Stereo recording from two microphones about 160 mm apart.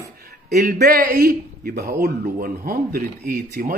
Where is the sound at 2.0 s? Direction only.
65° right (ahead or behind).